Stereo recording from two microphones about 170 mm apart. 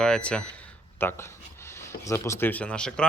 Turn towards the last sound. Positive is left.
turn(degrees=5)  # may be behind; listen again after turning